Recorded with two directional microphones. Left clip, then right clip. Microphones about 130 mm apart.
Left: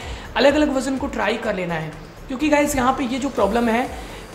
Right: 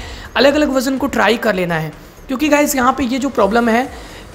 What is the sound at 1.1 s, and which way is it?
Speech, 50° right (ahead or behind).